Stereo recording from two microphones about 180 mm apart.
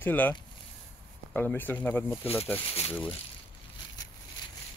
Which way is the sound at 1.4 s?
10° left (ahead or behind).